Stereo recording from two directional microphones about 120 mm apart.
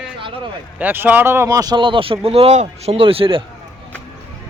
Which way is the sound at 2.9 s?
50° right (ahead or behind).